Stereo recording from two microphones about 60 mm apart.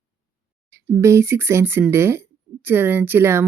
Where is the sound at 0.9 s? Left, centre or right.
Right.